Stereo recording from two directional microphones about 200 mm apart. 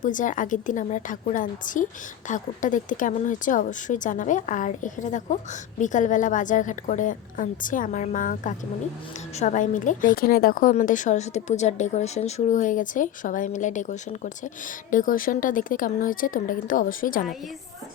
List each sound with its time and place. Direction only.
0.0 s a woman's voice: 40° left (ahead or behind)